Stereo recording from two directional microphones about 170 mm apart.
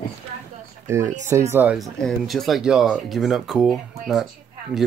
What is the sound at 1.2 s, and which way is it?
Speech, 15° right (ahead or behind).